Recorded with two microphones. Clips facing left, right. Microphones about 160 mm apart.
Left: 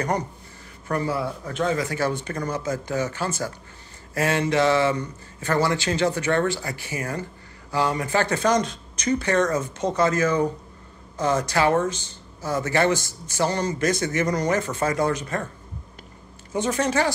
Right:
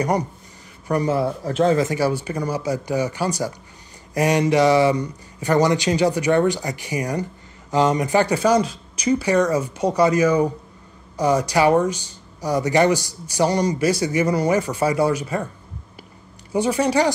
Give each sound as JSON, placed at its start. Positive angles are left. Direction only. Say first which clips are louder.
{"t": 0.8, "sound": "a man's voice", "louder": "right 5 dB", "side_deg": -15}
{"t": 1.1, "sound": "speech", "louder": "right 6 dB", "side_deg": -35}
{"t": 1.9, "sound": "speech", "louder": "right 4 dB", "side_deg": -10}
{"t": 16.5, "sound": "speech", "louder": "right 4 dB", "side_deg": -10}